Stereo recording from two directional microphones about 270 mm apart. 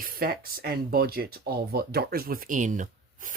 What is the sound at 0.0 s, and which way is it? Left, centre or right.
Speech, right.